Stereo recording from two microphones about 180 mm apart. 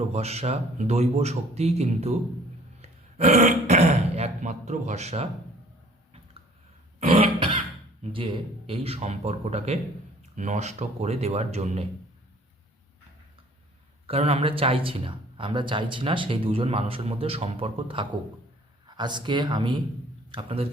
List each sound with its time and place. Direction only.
0.1 s speech: 35° right (ahead or behind)
7.2 s cough: 30° right (ahead or behind)
8.0 s speech: 30° right (ahead or behind)
14.1 s speech: 35° right (ahead or behind)